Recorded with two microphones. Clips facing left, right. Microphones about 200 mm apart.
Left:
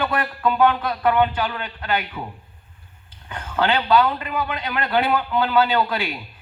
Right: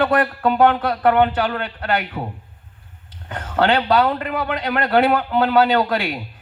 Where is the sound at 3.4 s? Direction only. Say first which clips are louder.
Right 4 dB; 40° right (ahead or behind).